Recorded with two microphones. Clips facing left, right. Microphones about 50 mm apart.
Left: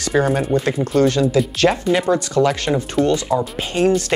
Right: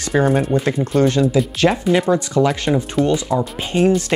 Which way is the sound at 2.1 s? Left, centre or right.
Centre.